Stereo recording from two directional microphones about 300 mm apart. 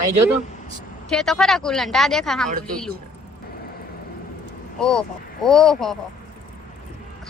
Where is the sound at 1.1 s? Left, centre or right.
Centre.